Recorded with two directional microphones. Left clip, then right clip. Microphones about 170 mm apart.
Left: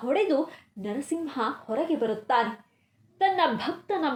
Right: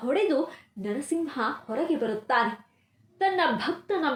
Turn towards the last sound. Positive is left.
turn(degrees=35)  # may be behind; listen again after turning